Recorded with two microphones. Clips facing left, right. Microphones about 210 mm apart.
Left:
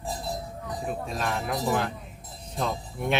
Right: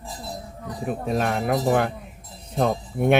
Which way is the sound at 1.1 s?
55° right (ahead or behind).